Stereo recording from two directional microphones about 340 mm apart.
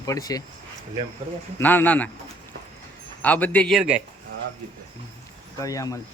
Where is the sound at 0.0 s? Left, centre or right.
Centre.